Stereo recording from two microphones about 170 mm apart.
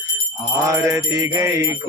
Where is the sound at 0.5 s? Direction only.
15° right (ahead or behind).